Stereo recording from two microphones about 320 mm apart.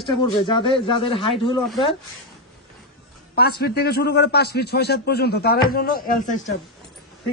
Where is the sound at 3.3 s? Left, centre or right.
Left.